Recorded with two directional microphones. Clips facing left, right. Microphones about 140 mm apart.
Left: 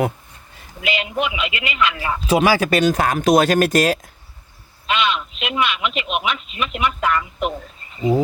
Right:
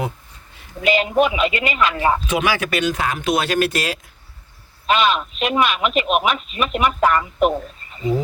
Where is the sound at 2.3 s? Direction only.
35° left (ahead or behind).